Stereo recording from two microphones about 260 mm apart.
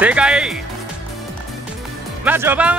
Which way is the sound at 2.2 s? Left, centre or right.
Centre.